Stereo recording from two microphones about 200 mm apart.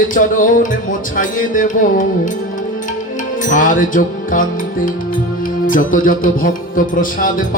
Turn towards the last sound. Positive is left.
turn(degrees=45)  # may be behind; listen again after turning